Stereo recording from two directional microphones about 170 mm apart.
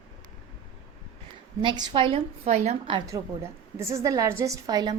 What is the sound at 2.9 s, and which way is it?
A woman's voice, 20° right (ahead or behind).